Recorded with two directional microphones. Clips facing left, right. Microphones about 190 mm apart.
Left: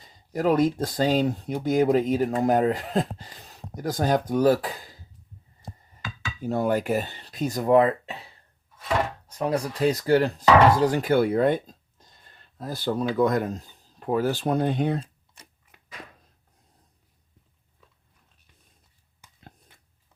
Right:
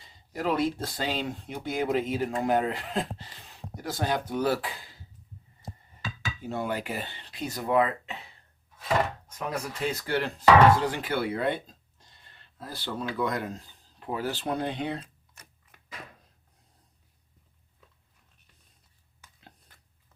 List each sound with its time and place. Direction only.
0.0 s speech: 45° left (ahead or behind)
6.4 s speech: 45° left (ahead or behind)
9.2 s speech: 35° left (ahead or behind)